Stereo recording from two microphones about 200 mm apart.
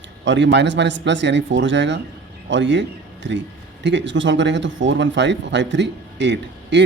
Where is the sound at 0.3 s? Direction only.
65° right (ahead or behind).